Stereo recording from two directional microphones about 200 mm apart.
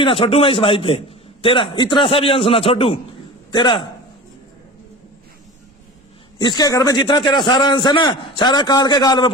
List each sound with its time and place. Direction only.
0.0 s a man's voice: 25° left (ahead or behind)
6.4 s a man's voice: 20° left (ahead or behind)